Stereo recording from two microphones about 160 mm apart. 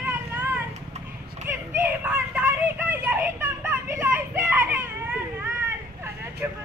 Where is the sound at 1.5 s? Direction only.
15° right (ahead or behind).